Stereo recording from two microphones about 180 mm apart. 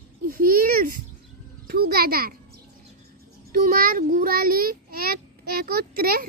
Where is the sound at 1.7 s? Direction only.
60° right (ahead or behind).